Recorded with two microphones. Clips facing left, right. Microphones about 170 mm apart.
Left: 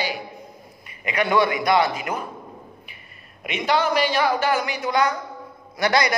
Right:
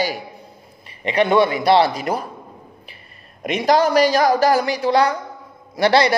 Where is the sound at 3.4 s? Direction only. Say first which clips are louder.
Right 6 dB; 40° right (ahead or behind).